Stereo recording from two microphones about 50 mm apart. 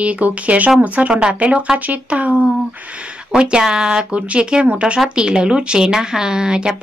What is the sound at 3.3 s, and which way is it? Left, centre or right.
Speech, centre.